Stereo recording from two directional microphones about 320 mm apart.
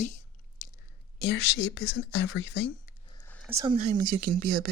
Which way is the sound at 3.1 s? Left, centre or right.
Centre.